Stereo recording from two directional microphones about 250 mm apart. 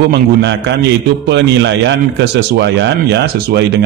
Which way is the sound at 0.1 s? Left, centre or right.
Right.